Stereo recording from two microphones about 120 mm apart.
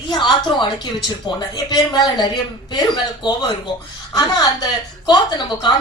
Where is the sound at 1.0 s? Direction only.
35° left (ahead or behind).